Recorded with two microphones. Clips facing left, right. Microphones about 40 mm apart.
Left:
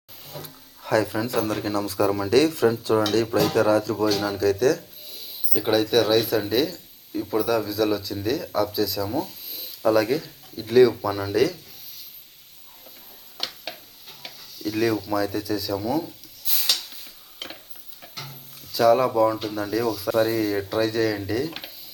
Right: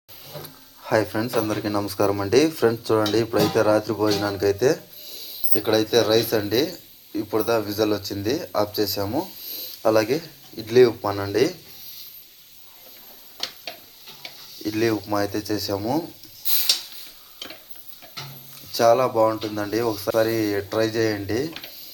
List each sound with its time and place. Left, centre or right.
0.3 s a sound: centre
1.5 s speech: centre
7.1 s speech: centre
13.4 s tick-tock: centre
18.7 s speech: centre